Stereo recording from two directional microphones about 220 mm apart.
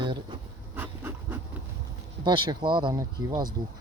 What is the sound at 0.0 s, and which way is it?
Bee, 20° right (ahead or behind).